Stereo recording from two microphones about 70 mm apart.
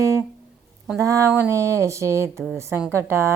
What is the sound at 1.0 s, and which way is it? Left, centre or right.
A woman's voice, right.